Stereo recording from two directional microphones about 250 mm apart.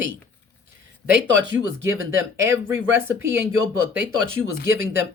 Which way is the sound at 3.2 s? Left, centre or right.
Centre.